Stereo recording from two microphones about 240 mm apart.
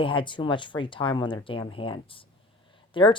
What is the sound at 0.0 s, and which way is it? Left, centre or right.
Speech, left.